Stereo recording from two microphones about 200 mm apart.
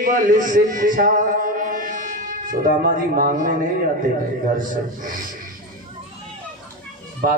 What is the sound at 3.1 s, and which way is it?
Speech, 45° right (ahead or behind).